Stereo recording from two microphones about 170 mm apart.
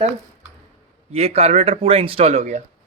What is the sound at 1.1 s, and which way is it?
Speech, 35° right (ahead or behind).